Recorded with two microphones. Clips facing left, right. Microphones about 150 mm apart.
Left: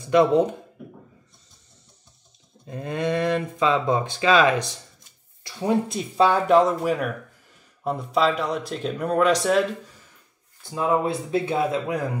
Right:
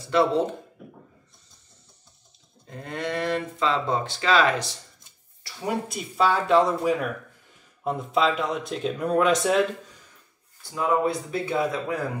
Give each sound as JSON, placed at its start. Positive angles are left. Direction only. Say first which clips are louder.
{"t": 0.1, "sound": "speech", "louder": "left 4 dB", "side_deg": 15}
{"t": 2.6, "sound": "speech", "louder": "left 5 dB", "side_deg": 15}
{"t": 6.2, "sound": "speech", "louder": "left 3 dB", "side_deg": 15}
{"t": 10.6, "sound": "speech", "louder": "left 1 dB", "side_deg": 25}